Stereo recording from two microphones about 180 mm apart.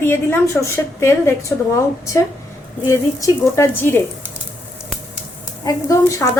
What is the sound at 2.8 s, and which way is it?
A woman's voice, 15° left (ahead or behind).